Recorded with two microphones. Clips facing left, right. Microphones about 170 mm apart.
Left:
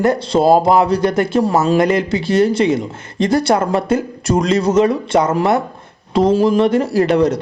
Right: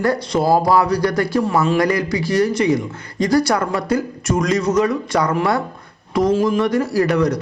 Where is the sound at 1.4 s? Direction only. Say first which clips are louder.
Left 4 dB; 35° left (ahead or behind).